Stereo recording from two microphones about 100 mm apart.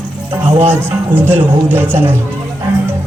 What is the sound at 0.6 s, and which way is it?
Speech, 25° right (ahead or behind).